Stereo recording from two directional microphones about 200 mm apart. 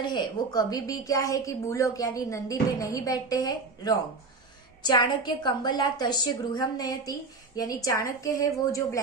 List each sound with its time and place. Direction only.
0.0 s a woman's voice: 20° left (ahead or behind)